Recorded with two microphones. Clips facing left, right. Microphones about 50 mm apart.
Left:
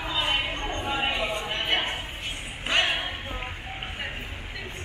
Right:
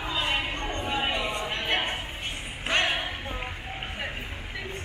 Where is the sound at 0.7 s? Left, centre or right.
Left.